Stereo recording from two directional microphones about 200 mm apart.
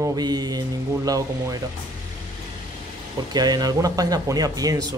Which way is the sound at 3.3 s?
20° right (ahead or behind).